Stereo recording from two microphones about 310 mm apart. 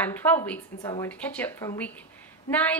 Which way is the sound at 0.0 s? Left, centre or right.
Centre.